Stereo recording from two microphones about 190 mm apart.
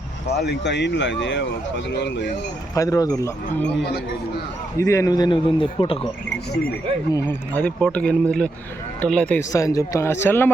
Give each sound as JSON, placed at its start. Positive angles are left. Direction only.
{"t": 0.3, "sound": "speech", "side_deg": 60}
{"t": 2.7, "sound": "speech", "side_deg": 15}
{"t": 4.8, "sound": "speech", "side_deg": 15}
{"t": 7.1, "sound": "speech", "side_deg": 15}
{"t": 9.4, "sound": "speech", "side_deg": 15}